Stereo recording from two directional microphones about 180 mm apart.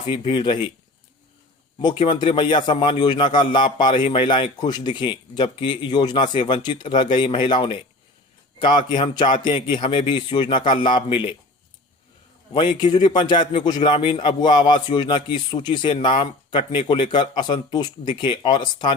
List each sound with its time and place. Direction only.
0.1 s a man's voice: 25° left (ahead or behind)
1.8 s a man's voice: 25° left (ahead or behind)
12.5 s a man's voice: 25° left (ahead or behind)